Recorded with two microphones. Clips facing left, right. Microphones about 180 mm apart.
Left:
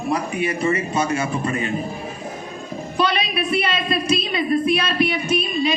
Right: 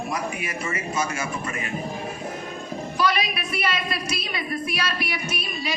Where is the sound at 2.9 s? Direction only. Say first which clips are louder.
Left 3 dB; 25° left (ahead or behind).